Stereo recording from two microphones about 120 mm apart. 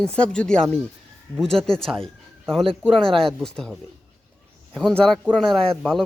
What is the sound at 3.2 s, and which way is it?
Speech, 5° left (ahead or behind).